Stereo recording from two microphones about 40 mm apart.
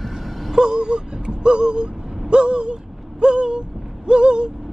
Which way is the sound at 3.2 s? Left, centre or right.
Right.